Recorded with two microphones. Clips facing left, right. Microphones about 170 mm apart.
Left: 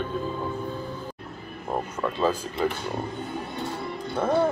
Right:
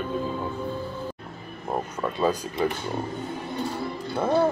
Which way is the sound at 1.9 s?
15° right (ahead or behind).